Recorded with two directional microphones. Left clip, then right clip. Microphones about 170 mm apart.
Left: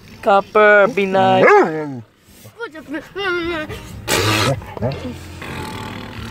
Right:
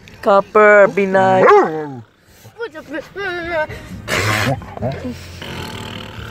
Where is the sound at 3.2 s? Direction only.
55° left (ahead or behind).